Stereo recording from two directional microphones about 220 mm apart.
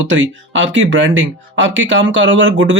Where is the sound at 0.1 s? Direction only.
55° right (ahead or behind).